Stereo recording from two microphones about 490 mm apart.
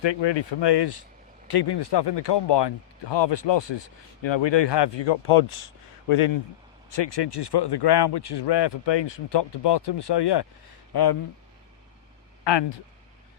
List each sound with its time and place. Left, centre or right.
0.0 s speech: left
6.9 s speech: left
12.5 s speech: left